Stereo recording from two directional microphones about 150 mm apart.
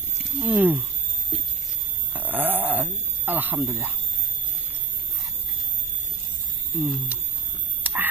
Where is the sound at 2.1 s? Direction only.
10° right (ahead or behind).